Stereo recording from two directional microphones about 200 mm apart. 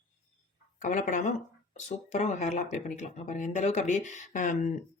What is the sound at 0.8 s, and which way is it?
Speech, 40° left (ahead or behind).